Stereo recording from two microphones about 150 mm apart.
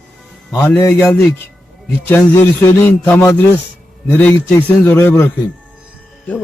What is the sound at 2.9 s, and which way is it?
Speech, 10° left (ahead or behind).